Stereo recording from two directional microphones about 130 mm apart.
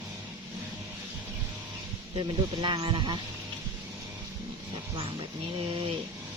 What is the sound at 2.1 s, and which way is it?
Speech, 40° right (ahead or behind).